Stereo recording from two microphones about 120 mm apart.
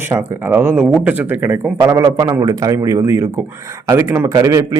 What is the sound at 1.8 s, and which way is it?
Speech, 30° right (ahead or behind).